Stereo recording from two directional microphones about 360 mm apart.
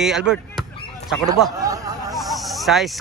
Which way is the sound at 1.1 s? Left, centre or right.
Centre.